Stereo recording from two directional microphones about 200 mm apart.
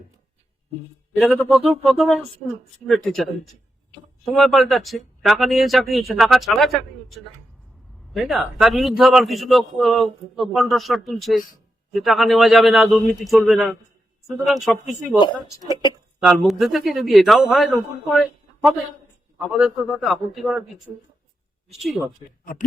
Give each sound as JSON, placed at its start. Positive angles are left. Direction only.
{"t": 1.4, "sound": "a man's voice", "side_deg": 0}
{"t": 15.2, "sound": "speech", "side_deg": 25}
{"t": 16.2, "sound": "a man's voice", "side_deg": 0}
{"t": 21.8, "sound": "a man's voice", "side_deg": 0}